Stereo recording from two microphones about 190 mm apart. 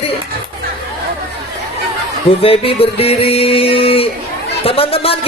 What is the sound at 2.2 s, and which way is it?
Music, 30° left (ahead or behind).